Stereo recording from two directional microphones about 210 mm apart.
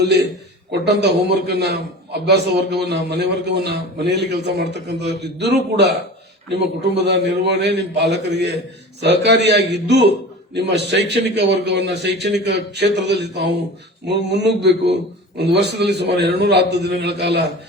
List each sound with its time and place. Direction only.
0.0 s a man's voice: 55° right (ahead or behind)